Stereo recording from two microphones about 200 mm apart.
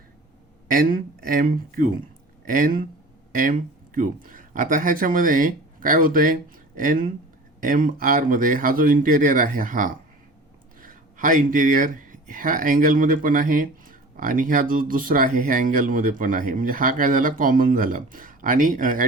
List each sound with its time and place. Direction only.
0.7 s speech: 45° right (ahead or behind)